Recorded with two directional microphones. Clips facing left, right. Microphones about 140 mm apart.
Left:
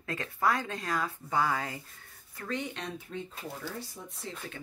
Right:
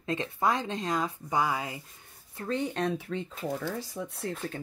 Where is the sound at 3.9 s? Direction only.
55° right (ahead or behind).